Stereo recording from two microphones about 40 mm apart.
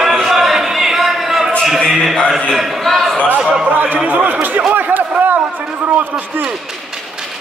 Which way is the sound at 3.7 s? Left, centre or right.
Right.